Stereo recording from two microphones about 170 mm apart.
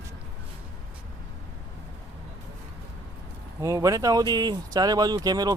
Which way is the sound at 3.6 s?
20° right (ahead or behind).